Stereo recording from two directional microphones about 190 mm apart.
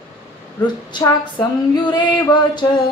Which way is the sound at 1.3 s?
25° left (ahead or behind).